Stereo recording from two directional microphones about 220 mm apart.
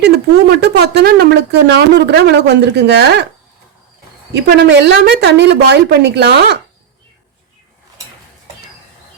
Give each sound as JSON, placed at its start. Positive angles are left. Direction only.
{"t": 0.6, "sound": "speech", "side_deg": -45}
{"t": 4.4, "sound": "speech", "side_deg": -50}